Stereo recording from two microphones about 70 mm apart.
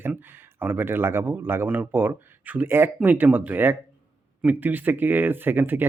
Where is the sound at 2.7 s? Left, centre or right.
Right.